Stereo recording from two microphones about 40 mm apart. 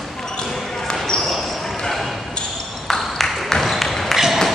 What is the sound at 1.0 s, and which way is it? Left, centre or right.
Basketball bounce, centre.